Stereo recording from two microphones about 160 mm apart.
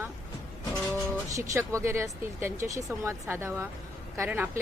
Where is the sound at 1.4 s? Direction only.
20° right (ahead or behind).